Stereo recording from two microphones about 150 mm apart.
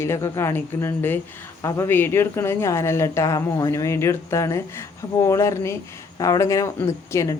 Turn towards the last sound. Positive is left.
turn(degrees=20)  # may be behind; listen again after turning